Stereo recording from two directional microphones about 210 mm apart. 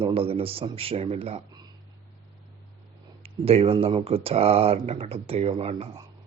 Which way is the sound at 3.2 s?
25° right (ahead or behind).